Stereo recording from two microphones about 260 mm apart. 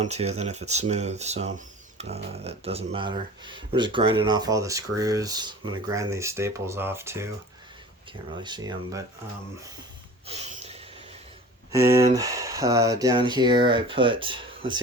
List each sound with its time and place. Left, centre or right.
0.0 s speech: right
8.4 s speech: centre
10.2 s snort: right
11.7 s speech: centre